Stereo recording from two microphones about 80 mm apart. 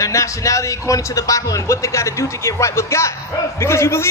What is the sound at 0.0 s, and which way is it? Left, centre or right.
A man's voice, left.